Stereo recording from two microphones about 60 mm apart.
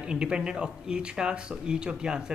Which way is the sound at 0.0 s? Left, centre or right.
Centre.